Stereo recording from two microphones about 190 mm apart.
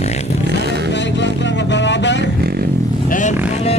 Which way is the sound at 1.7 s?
70° left (ahead or behind).